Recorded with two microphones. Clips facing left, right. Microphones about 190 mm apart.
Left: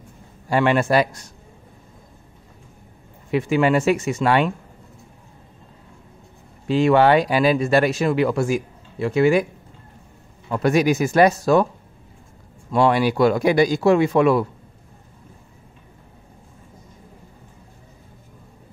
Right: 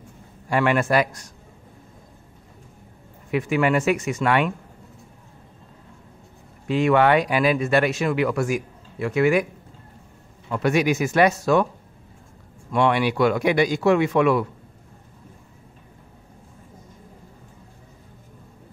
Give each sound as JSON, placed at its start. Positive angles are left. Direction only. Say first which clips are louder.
{"t": 0.5, "sound": "speech", "louder": "left 2 dB", "side_deg": 30}
{"t": 3.3, "sound": "speech", "louder": "left 3 dB", "side_deg": 30}
{"t": 6.7, "sound": "speech", "louder": "left 2 dB", "side_deg": 30}
{"t": 10.5, "sound": "speech", "louder": "left 3 dB", "side_deg": 40}
{"t": 12.7, "sound": "speech", "louder": "left 3 dB", "side_deg": 35}